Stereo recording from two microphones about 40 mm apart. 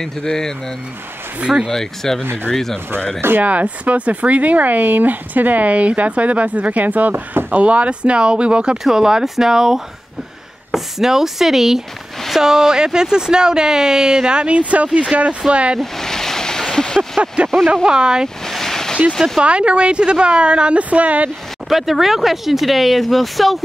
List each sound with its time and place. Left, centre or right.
0.0 s speech: centre
1.7 s speech: centre
3.2 s speech: right
3.4 s a woman's voice: right
8.8 s a woman's voice: centre; by 15.8 s right
15.8 s a sound: centre
17.8 s a woman's voice: centre
18.4 s a sound: centre
19.4 s a woman's voice: right
21.6 s speech: centre